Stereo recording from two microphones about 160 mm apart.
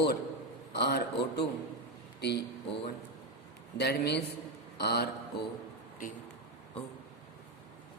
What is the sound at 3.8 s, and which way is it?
Speech, 90° left.